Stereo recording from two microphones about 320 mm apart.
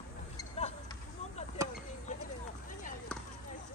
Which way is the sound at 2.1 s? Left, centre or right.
Left.